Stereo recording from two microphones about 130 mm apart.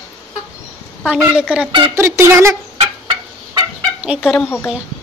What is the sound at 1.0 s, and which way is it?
Speech, 10° right (ahead or behind).